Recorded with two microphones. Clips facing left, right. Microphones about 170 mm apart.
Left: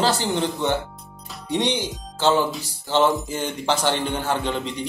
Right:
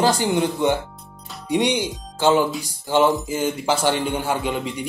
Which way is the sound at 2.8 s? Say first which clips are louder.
Right 2 dB; 10° right (ahead or behind).